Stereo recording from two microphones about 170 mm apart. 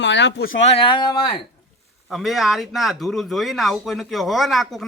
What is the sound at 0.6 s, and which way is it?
Speech, 35° left (ahead or behind).